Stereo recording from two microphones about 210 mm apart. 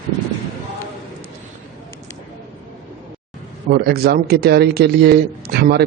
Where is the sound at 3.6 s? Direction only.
45° right (ahead or behind).